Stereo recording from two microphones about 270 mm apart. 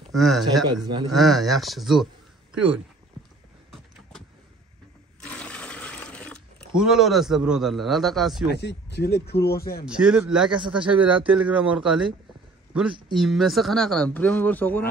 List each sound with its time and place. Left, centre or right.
0.1 s speech: centre
5.2 s water: centre
8.5 s speech: left
9.8 s speech: centre
13.1 s speech: centre